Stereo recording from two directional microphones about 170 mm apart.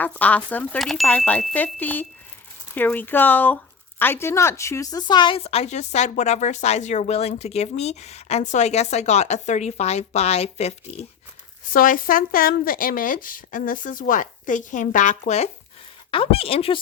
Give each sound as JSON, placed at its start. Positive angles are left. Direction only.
{"t": 0.0, "sound": "speech", "side_deg": 10}
{"t": 11.7, "sound": "a woman's voice", "side_deg": 55}
{"t": 16.1, "sound": "speech", "side_deg": 35}